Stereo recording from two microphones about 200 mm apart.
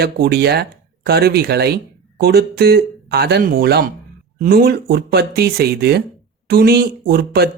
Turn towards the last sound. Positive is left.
turn(degrees=-50)  # may be behind; listen again after turning